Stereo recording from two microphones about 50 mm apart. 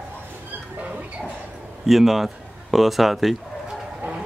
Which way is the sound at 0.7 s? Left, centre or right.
Right.